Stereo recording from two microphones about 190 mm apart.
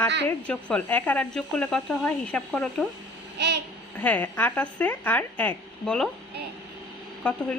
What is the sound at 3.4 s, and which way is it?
Babbling, 65° right (ahead or behind).